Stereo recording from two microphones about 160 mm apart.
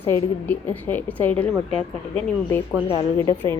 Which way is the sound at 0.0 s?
10° left (ahead or behind).